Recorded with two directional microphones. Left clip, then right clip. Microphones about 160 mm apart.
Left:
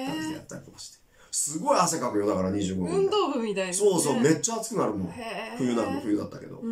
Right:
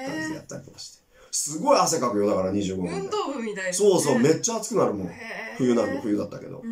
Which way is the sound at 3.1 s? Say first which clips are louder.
Left 2 dB; 25° left (ahead or behind).